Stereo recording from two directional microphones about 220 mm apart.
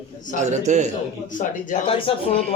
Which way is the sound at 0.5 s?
30° right (ahead or behind).